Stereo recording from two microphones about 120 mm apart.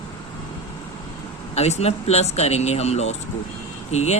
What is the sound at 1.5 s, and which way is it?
Speech, 60° left (ahead or behind).